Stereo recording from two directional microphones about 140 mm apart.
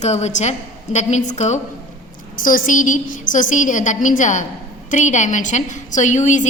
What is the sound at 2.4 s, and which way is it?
A woman's voice, 70° left (ahead or behind).